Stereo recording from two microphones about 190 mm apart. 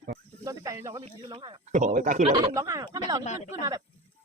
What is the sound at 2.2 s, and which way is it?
Speech, 25° right (ahead or behind).